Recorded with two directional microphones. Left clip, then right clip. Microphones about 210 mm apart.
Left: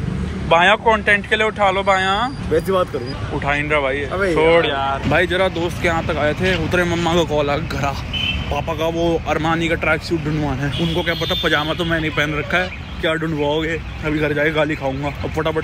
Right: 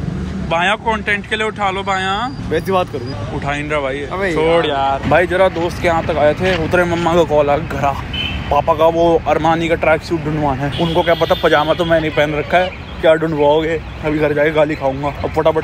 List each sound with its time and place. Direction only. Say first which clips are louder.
0.5 s speech: left 3 dB; 15° right (ahead or behind)
3.4 s speech: left 1 dB; 15° right (ahead or behind)
5.1 s speech: right 4 dB; centre (ahead or behind)